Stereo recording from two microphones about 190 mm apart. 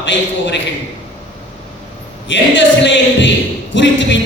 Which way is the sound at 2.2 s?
70° left (ahead or behind).